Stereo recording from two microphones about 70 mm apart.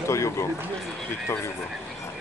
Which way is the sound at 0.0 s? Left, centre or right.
Left.